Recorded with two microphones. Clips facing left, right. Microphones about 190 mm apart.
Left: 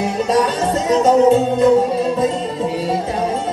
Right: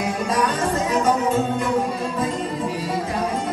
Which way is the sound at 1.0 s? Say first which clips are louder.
Left 11 dB; 25° left (ahead or behind).